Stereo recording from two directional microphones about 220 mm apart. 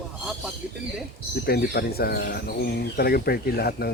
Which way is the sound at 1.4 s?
45° left (ahead or behind).